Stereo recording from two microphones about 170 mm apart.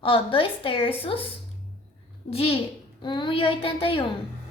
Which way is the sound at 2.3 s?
35° left (ahead or behind).